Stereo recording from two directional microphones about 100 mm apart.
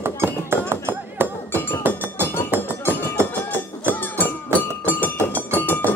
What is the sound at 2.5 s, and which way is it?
Music, 20° right (ahead or behind).